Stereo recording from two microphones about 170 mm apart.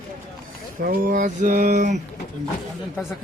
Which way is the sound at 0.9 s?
50° right (ahead or behind).